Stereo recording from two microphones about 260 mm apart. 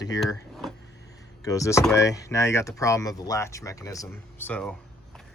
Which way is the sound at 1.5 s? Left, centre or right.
Centre.